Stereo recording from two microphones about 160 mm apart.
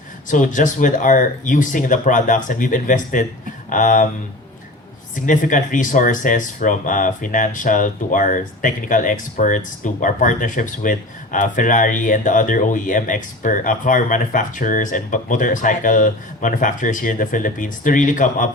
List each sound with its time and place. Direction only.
0.3 s speech: 55° left (ahead or behind)
5.1 s speech: 55° left (ahead or behind)